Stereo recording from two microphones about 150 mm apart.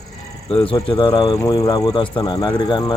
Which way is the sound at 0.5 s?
35° left (ahead or behind).